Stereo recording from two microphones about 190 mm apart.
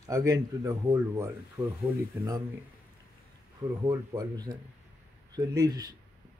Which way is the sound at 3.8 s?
20° right (ahead or behind).